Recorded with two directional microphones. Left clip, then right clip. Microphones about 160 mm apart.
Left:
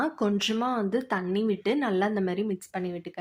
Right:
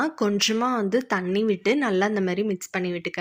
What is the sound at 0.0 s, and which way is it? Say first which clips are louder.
Speech: right 4 dB; 15° right (ahead or behind).